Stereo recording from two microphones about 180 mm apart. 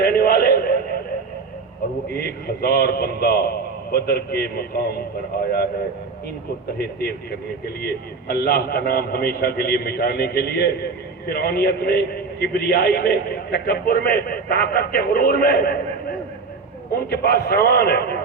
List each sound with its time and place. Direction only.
0.0 s a sound: 60° left (ahead or behind)
2.1 s a man's voice: 60° left (ahead or behind)
6.7 s a man's voice: 60° left (ahead or behind)